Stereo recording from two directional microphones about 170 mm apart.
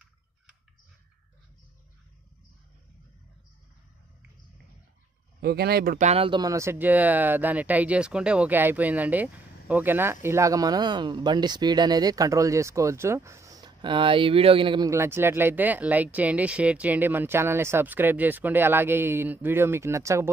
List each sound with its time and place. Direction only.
5.4 s speech: 70° right (ahead or behind)
5.9 s speech: 40° right (ahead or behind)
14.9 s speech: 15° right (ahead or behind)